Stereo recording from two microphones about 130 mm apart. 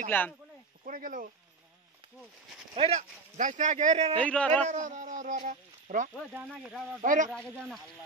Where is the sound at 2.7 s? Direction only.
55° right (ahead or behind).